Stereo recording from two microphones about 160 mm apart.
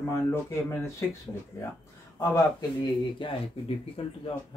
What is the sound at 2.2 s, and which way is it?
Speech, 25° left (ahead or behind).